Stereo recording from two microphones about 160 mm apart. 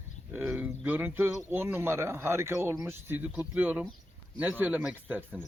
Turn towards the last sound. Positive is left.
turn(degrees=-10)  # may be behind; listen again after turning